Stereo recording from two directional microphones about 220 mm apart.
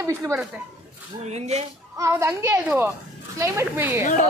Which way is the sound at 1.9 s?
15° right (ahead or behind).